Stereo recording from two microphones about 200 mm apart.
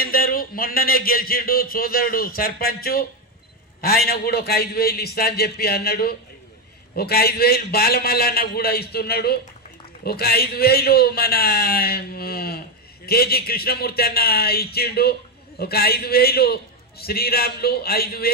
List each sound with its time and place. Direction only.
0.0 s a man's voice: 45° left (ahead or behind)